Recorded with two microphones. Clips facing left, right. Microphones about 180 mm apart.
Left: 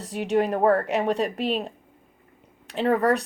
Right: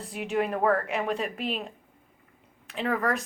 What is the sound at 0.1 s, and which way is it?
A woman's voice, 35° left (ahead or behind).